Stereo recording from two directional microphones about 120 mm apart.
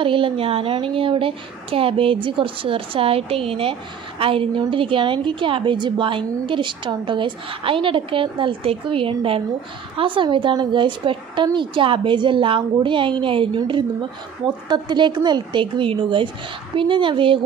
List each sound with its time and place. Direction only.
0.0 s a woman's voice: 45° right (ahead or behind)
14.7 s a woman's voice: 40° right (ahead or behind)